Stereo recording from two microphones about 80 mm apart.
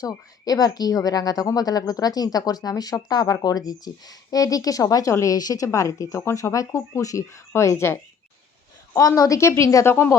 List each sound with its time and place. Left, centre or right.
0.0 s a woman's voice: left
9.0 s a woman's voice: left
9.8 s a woman's voice: left